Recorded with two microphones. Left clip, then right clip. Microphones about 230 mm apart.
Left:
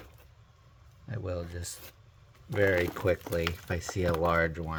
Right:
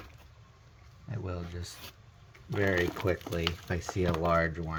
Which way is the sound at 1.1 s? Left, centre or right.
Left.